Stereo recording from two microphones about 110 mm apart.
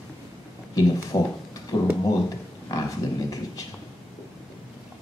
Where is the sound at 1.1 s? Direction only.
35° left (ahead or behind).